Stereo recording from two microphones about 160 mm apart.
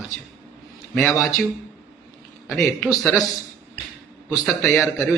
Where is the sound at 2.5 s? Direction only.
Centre (ahead or behind).